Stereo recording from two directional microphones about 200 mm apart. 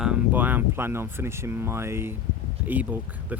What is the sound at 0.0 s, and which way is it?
Speech, 5° right (ahead or behind).